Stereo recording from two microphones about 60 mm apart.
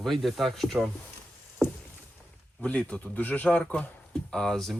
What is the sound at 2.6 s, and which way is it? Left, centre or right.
Speech, left.